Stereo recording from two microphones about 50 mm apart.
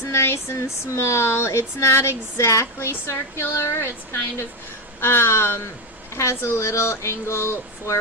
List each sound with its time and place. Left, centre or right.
0.0 s speech: left
2.7 s speech: left
6.1 s speech: left